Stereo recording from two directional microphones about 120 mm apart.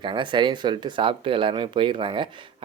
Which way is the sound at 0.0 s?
45° right (ahead or behind).